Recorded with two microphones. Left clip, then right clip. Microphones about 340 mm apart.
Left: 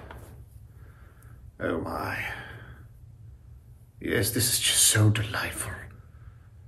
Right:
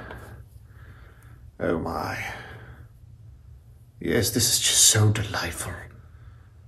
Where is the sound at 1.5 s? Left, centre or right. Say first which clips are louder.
Right 3 dB; centre.